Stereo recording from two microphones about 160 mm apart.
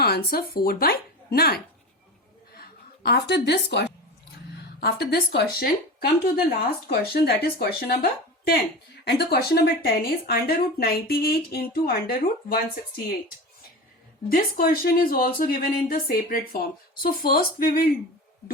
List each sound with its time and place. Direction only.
0.0 s speech: 75° left (ahead or behind)
2.6 s a woman's voice: 85° left
9.0 s speech: 85° left
14.3 s speech: 65° left (ahead or behind)